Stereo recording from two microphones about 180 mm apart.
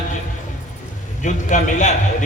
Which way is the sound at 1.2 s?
45° left (ahead or behind).